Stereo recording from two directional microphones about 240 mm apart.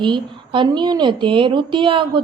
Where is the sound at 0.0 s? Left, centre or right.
Centre.